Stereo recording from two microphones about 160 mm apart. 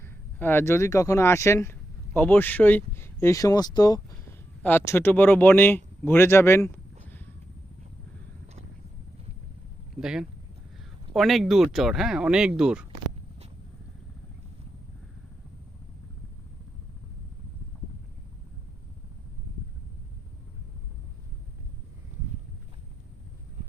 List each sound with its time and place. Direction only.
0.0 s speech: 15° left (ahead or behind)
4.6 s speech: 15° left (ahead or behind)
10.0 s speech: 5° right (ahead or behind)